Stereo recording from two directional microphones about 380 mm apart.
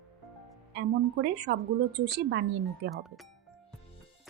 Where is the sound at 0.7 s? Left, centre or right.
Right.